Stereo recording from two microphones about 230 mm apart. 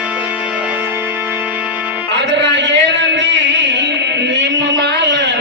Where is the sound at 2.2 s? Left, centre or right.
Right.